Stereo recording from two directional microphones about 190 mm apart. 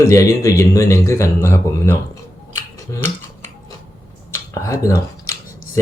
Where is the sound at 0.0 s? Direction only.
15° left (ahead or behind).